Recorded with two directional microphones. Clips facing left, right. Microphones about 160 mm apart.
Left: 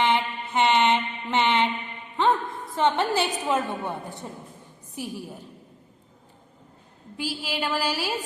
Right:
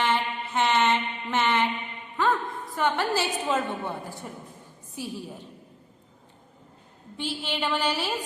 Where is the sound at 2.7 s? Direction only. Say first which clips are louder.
Left 3 dB; 25° left (ahead or behind).